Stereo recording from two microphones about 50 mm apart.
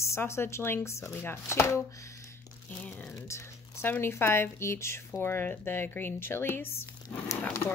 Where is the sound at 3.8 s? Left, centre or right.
Left.